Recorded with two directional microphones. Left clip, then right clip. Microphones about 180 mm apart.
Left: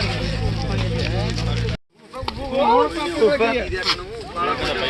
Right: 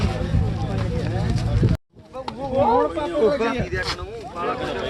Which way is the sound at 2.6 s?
35° right (ahead or behind).